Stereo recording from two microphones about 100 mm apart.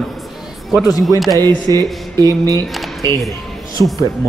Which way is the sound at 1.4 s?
40° right (ahead or behind).